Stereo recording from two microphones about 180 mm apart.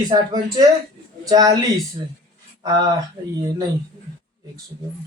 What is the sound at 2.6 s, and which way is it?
Speech, 20° right (ahead or behind).